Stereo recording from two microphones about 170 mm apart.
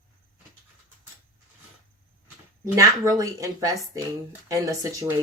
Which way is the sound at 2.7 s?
20° right (ahead or behind).